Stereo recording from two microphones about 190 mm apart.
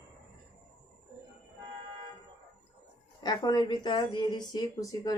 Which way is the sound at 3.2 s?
20° left (ahead or behind).